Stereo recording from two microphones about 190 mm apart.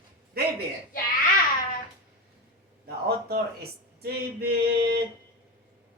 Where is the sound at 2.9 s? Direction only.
55° right (ahead or behind).